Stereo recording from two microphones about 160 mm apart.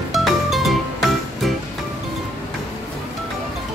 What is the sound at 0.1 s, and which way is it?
Music, centre (ahead or behind).